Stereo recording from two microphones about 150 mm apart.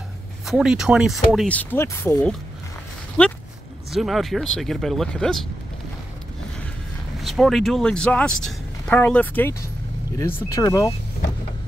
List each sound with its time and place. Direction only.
0.5 s speech: 5° right (ahead or behind)
1.5 s speech: 10° left (ahead or behind)
7.2 s speech: centre (ahead or behind); by 10.9 s 20° left (ahead or behind)